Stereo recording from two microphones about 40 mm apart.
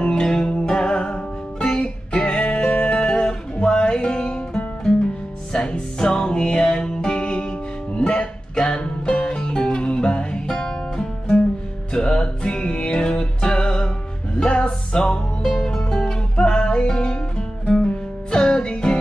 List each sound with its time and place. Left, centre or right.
0.0 s music: left